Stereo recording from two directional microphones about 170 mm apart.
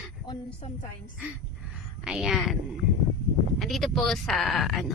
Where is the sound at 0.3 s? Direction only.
35° left (ahead or behind).